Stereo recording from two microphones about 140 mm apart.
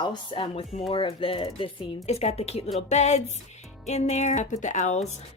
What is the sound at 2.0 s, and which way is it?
Speech, 50° left (ahead or behind).